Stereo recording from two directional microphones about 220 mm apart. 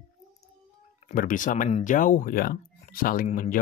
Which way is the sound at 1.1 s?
35° left (ahead or behind).